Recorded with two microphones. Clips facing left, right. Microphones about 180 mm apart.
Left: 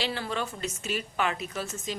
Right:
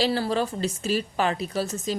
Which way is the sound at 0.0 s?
35° right (ahead or behind).